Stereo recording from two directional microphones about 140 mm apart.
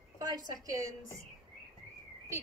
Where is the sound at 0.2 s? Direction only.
25° right (ahead or behind).